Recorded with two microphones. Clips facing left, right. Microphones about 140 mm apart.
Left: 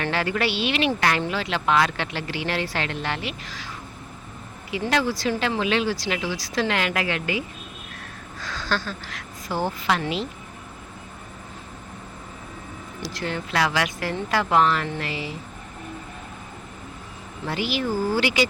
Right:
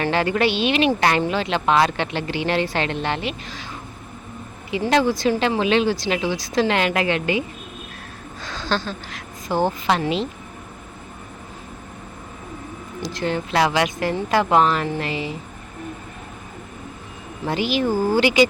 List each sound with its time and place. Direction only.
0.1 s speech: 20° right (ahead or behind)
4.7 s speech: 20° right (ahead or behind)
13.0 s speech: 20° right (ahead or behind)
17.4 s speech: 20° right (ahead or behind)